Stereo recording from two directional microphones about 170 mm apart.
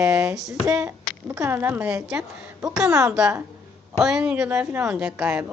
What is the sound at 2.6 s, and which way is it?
Speech, 20° right (ahead or behind).